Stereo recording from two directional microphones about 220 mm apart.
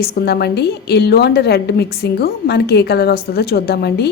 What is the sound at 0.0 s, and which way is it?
A woman's voice, 45° left (ahead or behind).